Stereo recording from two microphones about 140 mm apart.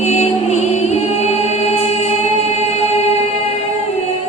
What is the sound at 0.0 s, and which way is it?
Music, 50° left (ahead or behind).